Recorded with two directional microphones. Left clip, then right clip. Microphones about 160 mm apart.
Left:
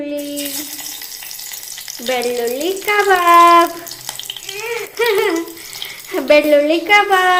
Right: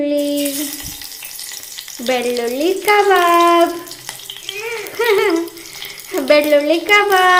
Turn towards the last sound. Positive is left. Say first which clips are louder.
# even
turn(degrees=-10)  # may be behind; listen again after turning